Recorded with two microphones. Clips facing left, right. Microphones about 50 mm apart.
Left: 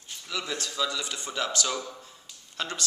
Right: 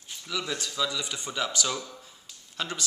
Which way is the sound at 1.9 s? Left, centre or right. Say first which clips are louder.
Left 1 dB; centre.